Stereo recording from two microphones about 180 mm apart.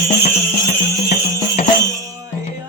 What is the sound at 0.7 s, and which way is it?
Music, 50° left (ahead or behind).